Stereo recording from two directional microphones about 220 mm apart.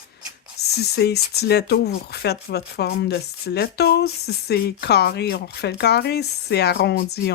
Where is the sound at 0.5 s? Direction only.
45° left (ahead or behind).